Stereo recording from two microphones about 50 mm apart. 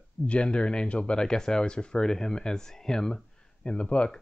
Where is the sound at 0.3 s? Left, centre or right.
Left.